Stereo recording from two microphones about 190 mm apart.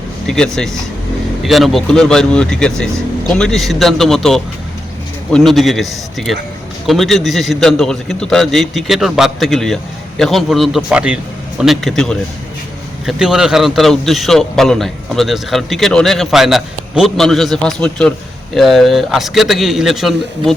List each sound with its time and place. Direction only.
0.3 s a man's voice: 5° left (ahead or behind)